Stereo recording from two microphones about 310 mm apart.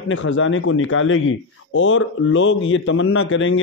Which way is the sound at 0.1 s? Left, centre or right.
Left.